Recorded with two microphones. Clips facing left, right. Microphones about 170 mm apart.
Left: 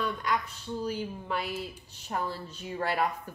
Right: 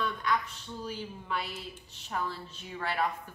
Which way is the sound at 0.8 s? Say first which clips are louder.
Left 3 dB; 40° left (ahead or behind).